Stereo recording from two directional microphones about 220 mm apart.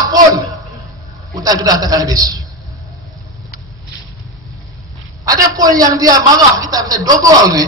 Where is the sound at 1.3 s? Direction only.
15° right (ahead or behind).